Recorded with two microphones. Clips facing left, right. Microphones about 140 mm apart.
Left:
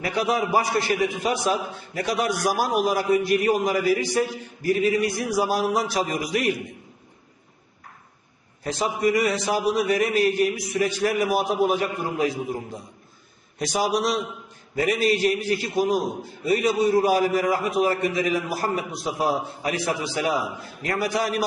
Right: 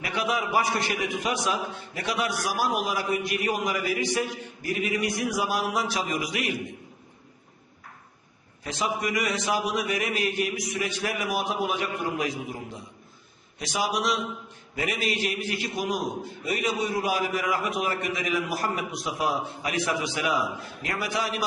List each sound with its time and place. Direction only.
0.0 s a man's voice: 35° left (ahead or behind)
8.6 s a man's voice: 35° left (ahead or behind)